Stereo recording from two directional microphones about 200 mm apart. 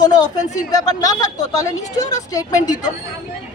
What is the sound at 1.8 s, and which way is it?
Speech, 35° left (ahead or behind).